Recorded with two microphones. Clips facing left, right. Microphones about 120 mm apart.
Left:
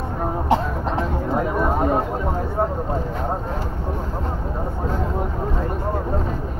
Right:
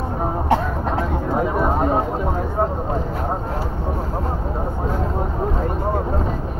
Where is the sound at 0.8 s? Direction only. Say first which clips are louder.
Right 1 dB; 15° right (ahead or behind).